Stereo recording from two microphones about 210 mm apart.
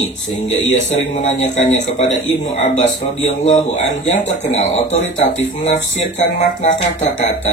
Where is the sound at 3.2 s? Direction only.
35° left (ahead or behind).